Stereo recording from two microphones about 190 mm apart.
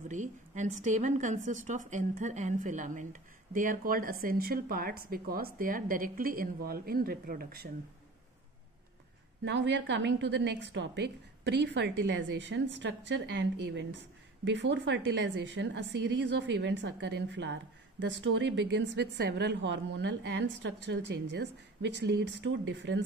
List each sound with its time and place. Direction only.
0.1 s a woman's voice: 40° right (ahead or behind)
9.4 s a woman's voice: 70° right (ahead or behind)